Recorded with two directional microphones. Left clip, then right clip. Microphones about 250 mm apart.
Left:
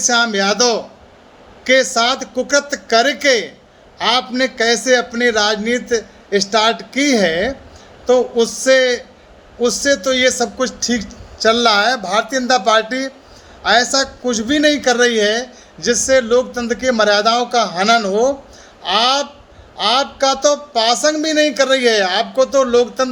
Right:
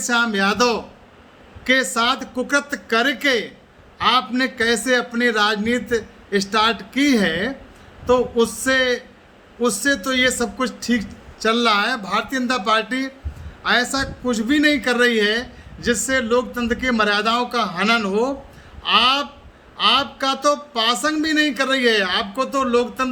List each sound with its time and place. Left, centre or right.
0.1 s a man's voice: centre
8.6 s a man's voice: centre